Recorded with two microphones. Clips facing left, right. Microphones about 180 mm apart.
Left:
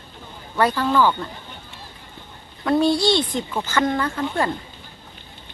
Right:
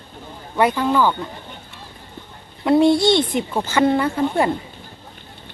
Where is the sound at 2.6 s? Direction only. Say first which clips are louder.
Right 4 dB; 20° right (ahead or behind).